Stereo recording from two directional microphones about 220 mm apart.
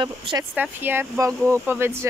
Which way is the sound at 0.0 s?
20° right (ahead or behind).